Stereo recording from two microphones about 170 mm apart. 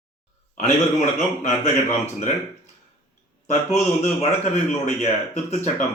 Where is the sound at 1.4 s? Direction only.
45° left (ahead or behind).